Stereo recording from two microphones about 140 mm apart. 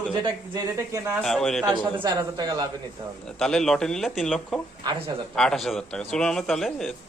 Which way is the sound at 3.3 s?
5° left (ahead or behind).